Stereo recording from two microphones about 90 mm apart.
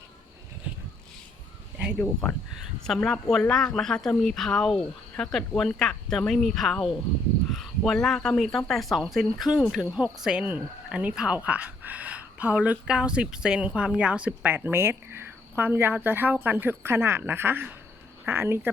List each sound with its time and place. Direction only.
2.8 s speech: 5° left (ahead or behind); by 18.7 s 25° right (ahead or behind)